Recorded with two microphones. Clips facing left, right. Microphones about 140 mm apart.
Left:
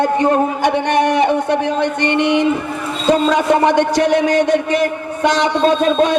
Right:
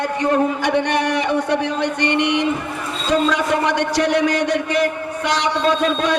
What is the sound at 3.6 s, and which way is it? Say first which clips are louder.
Speech: left 5 dB; 50° left (ahead or behind).